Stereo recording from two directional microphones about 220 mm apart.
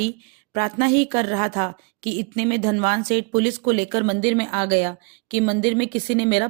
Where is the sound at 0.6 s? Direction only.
30° right (ahead or behind).